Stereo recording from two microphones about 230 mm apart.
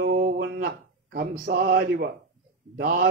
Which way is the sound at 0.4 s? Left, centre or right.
Right.